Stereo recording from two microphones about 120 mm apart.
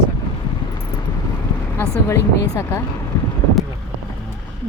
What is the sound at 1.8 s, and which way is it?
Speech, 25° left (ahead or behind).